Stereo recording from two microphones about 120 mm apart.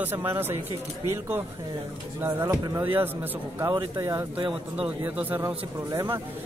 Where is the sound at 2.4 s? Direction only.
25° right (ahead or behind).